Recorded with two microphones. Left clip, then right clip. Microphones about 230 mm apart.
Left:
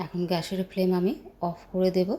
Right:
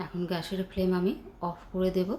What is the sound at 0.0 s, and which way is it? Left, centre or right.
Speech, centre.